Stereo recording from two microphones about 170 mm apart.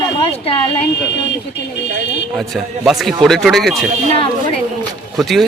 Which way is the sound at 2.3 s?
Centre (ahead or behind).